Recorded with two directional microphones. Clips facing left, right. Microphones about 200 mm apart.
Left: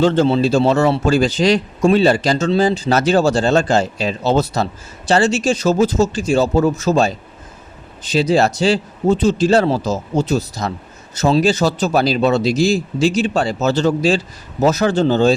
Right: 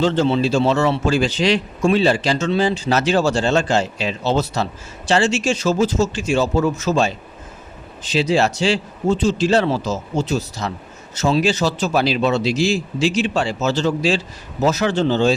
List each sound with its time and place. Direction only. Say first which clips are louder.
0.0 s speech: left 4 dB; 55° left (ahead or behind)
0.3 s a man's voice: left 3 dB; 40° left (ahead or behind)